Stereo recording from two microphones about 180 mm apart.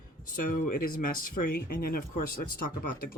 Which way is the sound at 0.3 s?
50° left (ahead or behind).